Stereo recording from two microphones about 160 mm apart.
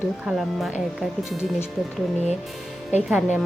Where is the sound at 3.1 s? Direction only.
5° right (ahead or behind).